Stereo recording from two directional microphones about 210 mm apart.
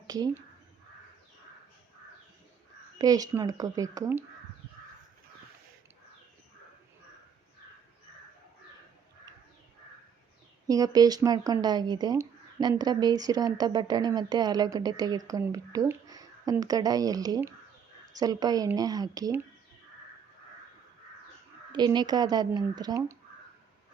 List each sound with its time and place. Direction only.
3.0 s speech: 15° right (ahead or behind)
10.7 s speech: 15° right (ahead or behind)
21.7 s speech: 20° right (ahead or behind)